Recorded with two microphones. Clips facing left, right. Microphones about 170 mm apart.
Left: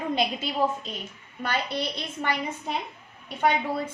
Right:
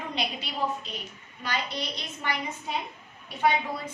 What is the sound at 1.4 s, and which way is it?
Speech, 55° left (ahead or behind).